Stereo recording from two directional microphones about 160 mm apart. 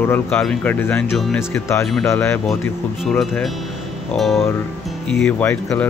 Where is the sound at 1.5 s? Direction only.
15° left (ahead or behind).